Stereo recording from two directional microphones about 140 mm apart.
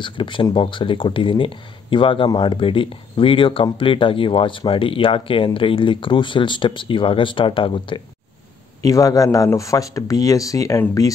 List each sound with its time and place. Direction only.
0.0 s speech: 35° left (ahead or behind)
8.8 s speech: 25° left (ahead or behind)